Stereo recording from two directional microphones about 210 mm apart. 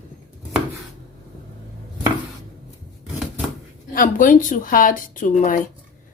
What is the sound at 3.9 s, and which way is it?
Speech, 40° left (ahead or behind).